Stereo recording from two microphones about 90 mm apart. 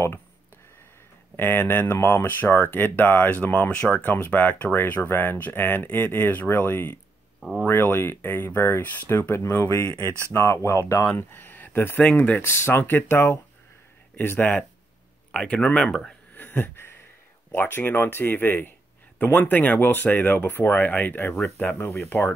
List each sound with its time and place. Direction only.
1.3 s speech: 25° left (ahead or behind)
7.3 s speech: centre (ahead or behind)
7.6 s speech: 25° left (ahead or behind)
9.8 s speech: 35° right (ahead or behind)
10.3 s speech: 30° left (ahead or behind); by 16.1 s 5° left (ahead or behind)
16.3 s a sound: 25° left (ahead or behind)
17.5 s speech: 25° left (ahead or behind)
21.7 s speech: 30° left (ahead or behind)